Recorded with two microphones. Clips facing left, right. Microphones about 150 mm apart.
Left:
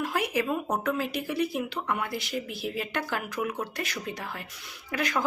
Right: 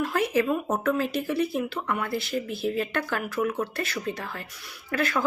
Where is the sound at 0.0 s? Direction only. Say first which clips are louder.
Right 4 dB; 15° left (ahead or behind).